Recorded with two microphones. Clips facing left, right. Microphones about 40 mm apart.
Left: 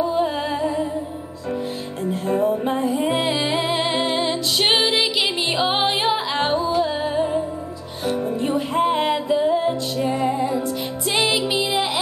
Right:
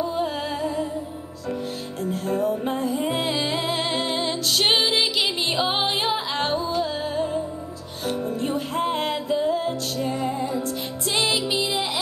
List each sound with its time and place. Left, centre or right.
0.0 s music: centre
2.0 s music: centre